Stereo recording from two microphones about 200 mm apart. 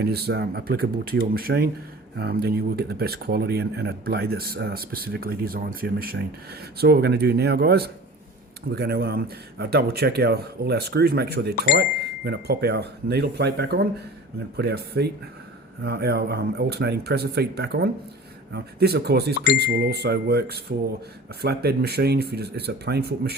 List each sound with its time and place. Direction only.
0.0 s speech: 55° right (ahead or behind)